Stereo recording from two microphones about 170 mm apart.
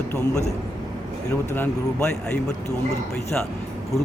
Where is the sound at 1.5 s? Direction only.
15° left (ahead or behind).